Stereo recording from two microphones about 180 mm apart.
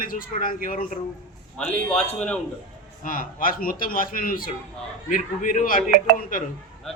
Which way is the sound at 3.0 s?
50° left (ahead or behind).